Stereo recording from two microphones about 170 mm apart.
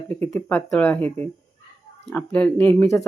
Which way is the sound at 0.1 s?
10° left (ahead or behind).